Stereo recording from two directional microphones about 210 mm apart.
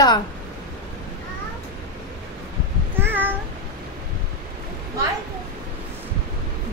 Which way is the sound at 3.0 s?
10° right (ahead or behind).